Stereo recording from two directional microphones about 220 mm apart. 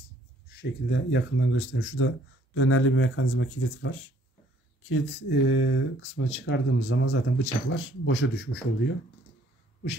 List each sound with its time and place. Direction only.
0.5 s a man's voice: 50° left (ahead or behind)